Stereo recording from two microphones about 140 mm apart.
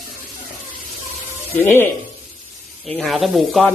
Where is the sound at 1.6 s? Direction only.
15° left (ahead or behind).